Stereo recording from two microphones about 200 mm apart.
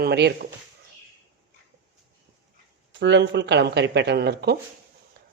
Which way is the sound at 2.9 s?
60° right (ahead or behind).